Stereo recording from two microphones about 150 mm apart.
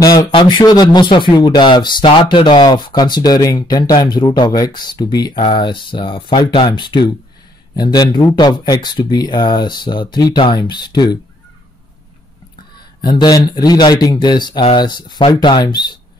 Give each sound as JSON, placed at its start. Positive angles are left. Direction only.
{"t": 0.0, "sound": "speech", "side_deg": 25}
{"t": 13.0, "sound": "speech", "side_deg": 25}